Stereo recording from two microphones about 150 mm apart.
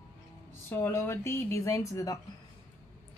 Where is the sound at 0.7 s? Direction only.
15° left (ahead or behind).